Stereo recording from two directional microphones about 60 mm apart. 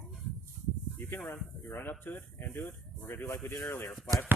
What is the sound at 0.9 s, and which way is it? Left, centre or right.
Speech, left.